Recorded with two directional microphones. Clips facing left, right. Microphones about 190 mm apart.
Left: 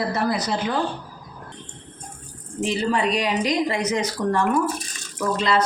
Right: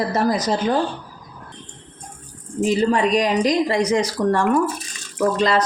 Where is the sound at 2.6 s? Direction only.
45° right (ahead or behind).